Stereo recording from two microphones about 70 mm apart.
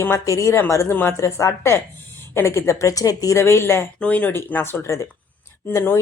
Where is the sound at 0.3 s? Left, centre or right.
Left.